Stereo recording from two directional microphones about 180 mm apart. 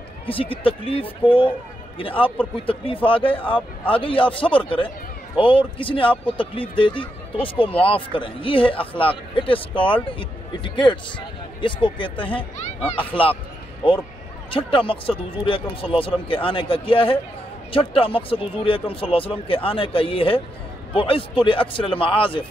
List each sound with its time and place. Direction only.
0.3 s speech: 30° left (ahead or behind)
14.5 s speech: 30° left (ahead or behind)